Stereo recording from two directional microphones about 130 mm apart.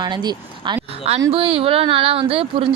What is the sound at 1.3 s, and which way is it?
Speech, 45° right (ahead or behind).